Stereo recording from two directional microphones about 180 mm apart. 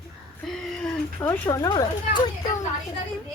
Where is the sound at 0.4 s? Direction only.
5° left (ahead or behind); by 2.3 s 20° left (ahead or behind).